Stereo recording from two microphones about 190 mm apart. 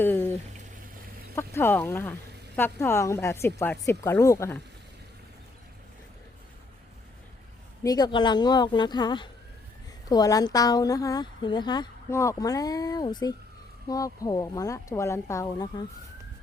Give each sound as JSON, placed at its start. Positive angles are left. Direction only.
{"t": 0.0, "sound": "a sound", "side_deg": 10}
{"t": 1.4, "sound": "speech", "side_deg": 10}
{"t": 7.9, "sound": "a woman's voice", "side_deg": 20}